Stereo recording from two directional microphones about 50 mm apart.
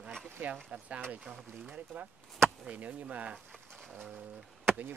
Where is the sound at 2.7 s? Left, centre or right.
Right.